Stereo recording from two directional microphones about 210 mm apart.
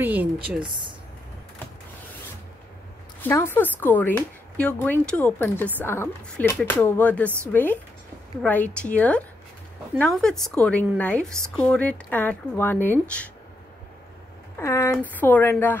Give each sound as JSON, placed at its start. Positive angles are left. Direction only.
{"t": 0.0, "sound": "a sound", "side_deg": -10}
{"t": 0.6, "sound": "speech", "side_deg": -25}
{"t": 3.2, "sound": "a woman's voice", "side_deg": 10}
{"t": 14.6, "sound": "speech", "side_deg": 10}